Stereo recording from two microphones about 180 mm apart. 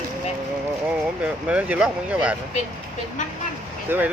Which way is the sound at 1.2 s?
5° right (ahead or behind).